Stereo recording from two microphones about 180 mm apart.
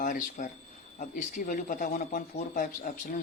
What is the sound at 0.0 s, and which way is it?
Speech, 45° left (ahead or behind).